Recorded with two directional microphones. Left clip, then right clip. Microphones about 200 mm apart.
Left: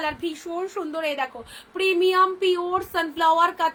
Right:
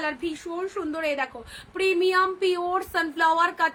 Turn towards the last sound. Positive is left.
turn(degrees=-15)  # may be behind; listen again after turning